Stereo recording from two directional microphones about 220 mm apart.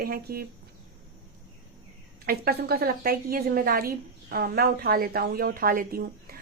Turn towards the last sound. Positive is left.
turn(degrees=-45)  # may be behind; listen again after turning